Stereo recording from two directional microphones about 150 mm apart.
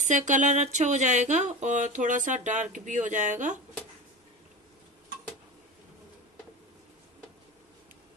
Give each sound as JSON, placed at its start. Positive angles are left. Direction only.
{"t": 0.0, "sound": "speech", "side_deg": -55}